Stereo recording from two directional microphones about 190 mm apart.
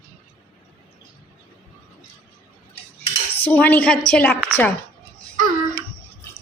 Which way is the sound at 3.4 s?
10° left (ahead or behind).